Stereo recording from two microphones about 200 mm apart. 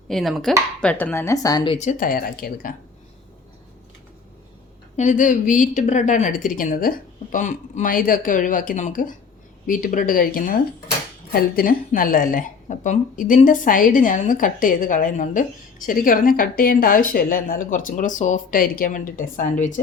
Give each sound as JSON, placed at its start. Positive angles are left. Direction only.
{"t": 0.1, "sound": "speech", "side_deg": 0}
{"t": 1.8, "sound": "a woman's voice", "side_deg": 40}
{"t": 4.9, "sound": "a woman's voice", "side_deg": 40}